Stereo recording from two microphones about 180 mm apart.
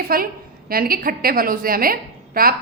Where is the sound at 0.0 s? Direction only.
55° right (ahead or behind).